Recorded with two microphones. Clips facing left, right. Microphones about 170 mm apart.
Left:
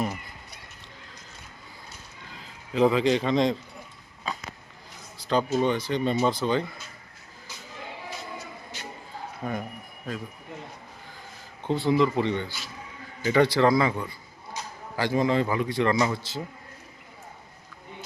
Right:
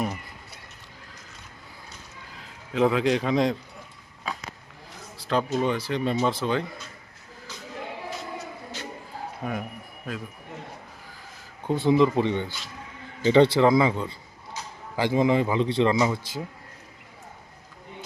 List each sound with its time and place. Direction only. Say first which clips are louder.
2.7 s a man's voice: left 1 dB; centre (ahead or behind)
4.3 s a sound: even; 5° right (ahead or behind)
5.3 s a man's voice: left 1 dB; centre (ahead or behind)
9.4 s speech: even; 10° right (ahead or behind)
11.6 s a man's voice: right 2 dB; 15° right (ahead or behind)